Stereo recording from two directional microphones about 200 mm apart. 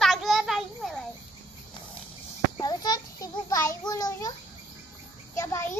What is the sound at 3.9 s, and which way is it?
Child singing, 20° left (ahead or behind).